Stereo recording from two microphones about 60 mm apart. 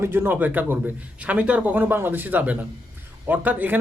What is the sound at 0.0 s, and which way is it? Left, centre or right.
A man's voice, right.